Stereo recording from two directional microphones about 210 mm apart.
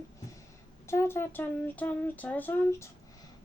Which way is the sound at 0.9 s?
10° left (ahead or behind).